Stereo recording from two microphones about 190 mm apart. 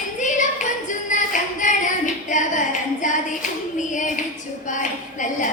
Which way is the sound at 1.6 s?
40° left (ahead or behind).